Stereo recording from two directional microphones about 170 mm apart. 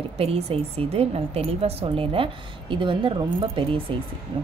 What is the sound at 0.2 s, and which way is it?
Speech, 35° right (ahead or behind).